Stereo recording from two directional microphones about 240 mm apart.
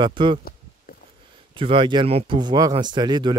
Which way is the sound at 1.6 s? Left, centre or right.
Right.